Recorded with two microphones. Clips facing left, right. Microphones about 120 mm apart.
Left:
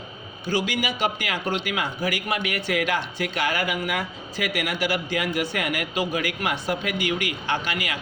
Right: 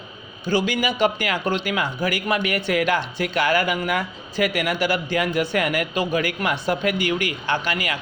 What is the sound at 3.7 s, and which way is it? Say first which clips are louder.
Speech: right 3 dB; 45° right (ahead or behind).